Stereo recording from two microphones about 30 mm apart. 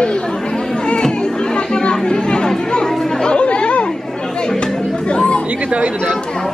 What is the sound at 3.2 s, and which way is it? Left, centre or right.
Chatter, left.